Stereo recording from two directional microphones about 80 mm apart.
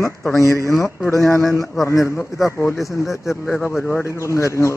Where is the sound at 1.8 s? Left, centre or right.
Left.